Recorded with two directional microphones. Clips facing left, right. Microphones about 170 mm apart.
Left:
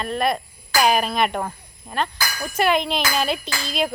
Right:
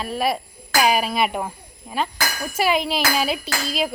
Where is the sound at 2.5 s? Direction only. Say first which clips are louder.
Left 1 dB; 5° right (ahead or behind).